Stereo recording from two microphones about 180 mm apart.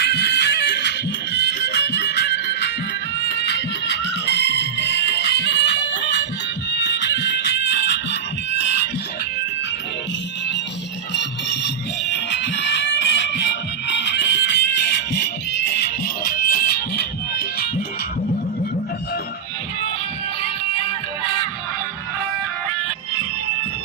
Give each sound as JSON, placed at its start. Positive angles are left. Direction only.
{"t": 0.0, "sound": "music", "side_deg": 65}
{"t": 11.2, "sound": "music", "side_deg": 75}